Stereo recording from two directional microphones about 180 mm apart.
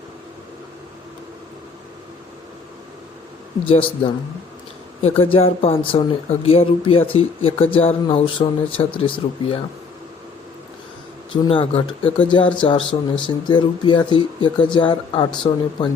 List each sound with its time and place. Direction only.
3.7 s speech: 30° left (ahead or behind)
11.3 s speech: 30° left (ahead or behind)